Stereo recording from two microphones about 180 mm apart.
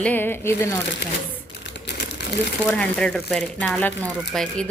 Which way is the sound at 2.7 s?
5° left (ahead or behind).